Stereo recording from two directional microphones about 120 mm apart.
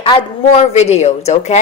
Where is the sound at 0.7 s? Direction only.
65° left (ahead or behind).